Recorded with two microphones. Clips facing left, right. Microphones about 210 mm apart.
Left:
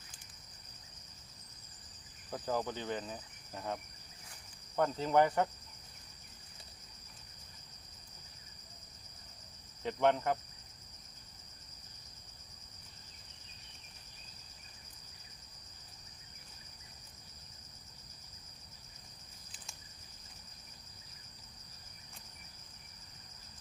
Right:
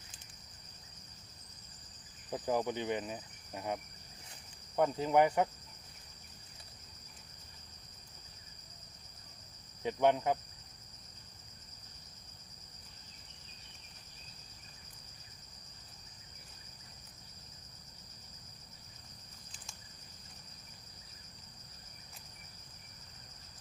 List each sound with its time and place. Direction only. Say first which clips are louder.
2.3 s insect: right 3 dB; 15° right (ahead or behind)
4.8 s insect: right 1 dB; 10° right (ahead or behind)
9.8 s insect: right 1 dB; 10° right (ahead or behind)